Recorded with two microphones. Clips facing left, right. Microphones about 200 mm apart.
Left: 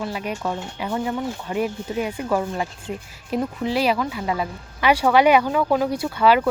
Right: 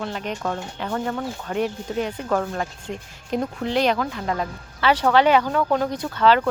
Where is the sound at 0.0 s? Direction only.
10° left (ahead or behind).